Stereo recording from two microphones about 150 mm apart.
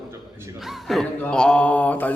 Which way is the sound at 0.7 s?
Centre (ahead or behind).